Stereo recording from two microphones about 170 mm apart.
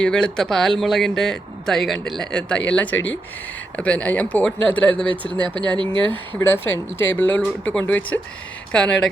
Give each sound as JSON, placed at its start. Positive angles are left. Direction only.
{"t": 0.0, "sound": "a man's voice", "side_deg": 5}
{"t": 5.7, "sound": "speech", "side_deg": -30}
{"t": 6.4, "sound": "speech", "side_deg": 15}